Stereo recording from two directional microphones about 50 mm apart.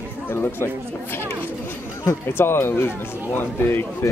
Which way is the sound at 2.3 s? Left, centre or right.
Left.